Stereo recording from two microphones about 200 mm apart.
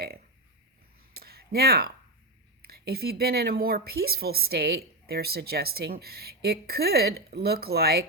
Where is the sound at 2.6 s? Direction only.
50° right (ahead or behind).